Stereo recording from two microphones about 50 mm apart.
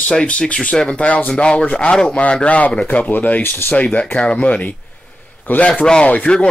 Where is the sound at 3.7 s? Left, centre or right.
Left.